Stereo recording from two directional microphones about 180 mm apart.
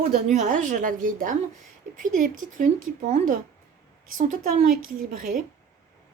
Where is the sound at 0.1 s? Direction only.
40° right (ahead or behind).